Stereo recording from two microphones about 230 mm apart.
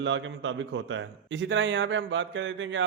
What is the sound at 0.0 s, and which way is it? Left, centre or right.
A man's voice, right.